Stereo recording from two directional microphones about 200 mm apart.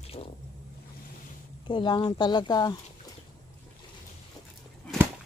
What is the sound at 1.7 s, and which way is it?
Speech, 25° left (ahead or behind).